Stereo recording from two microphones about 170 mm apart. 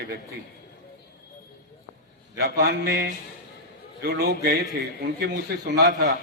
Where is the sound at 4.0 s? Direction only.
70° right (ahead or behind).